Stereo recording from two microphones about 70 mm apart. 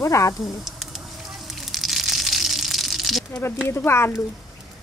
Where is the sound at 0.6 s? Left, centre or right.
Centre.